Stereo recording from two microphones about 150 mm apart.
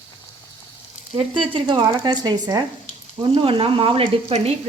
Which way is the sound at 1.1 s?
35° right (ahead or behind).